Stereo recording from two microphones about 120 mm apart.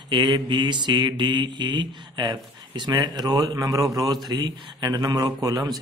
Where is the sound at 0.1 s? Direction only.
40° right (ahead or behind).